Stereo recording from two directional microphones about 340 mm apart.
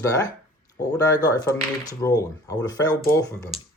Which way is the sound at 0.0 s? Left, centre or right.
Centre.